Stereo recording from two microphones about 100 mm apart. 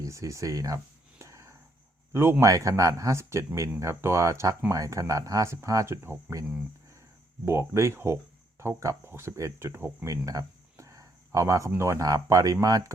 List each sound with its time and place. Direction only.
0.0 s speech: 30° right (ahead or behind)
1.2 s a sound: 30° right (ahead or behind)
2.1 s speech: 30° right (ahead or behind)
7.4 s speech: 25° right (ahead or behind)